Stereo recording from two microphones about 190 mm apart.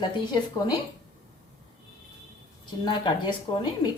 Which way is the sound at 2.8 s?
25° left (ahead or behind).